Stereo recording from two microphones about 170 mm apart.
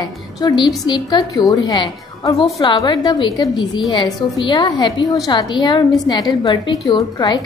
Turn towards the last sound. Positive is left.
turn(degrees=25)  # may be behind; listen again after turning